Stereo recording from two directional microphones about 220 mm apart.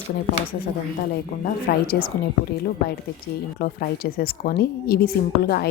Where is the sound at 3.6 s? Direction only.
45° left (ahead or behind).